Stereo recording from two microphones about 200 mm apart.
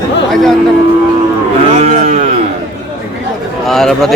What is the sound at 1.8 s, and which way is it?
Speech, 35° right (ahead or behind).